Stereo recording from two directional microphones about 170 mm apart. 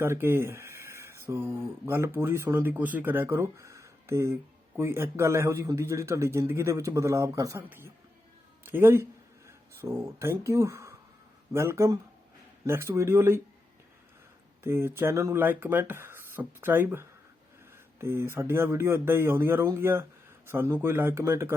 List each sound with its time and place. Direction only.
0.0 s a man's voice: 15° right (ahead or behind)
14.6 s a man's voice: 15° right (ahead or behind)